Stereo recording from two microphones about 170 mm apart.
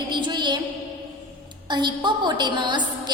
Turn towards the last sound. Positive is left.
turn(degrees=-25)  # may be behind; listen again after turning